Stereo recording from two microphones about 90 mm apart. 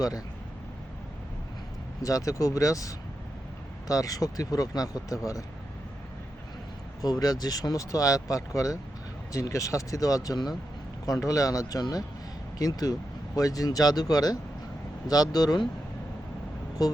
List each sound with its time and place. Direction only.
2.0 s speech: 40° left (ahead or behind)
7.0 s speech: 45° left (ahead or behind)
16.8 s speech: 45° left (ahead or behind)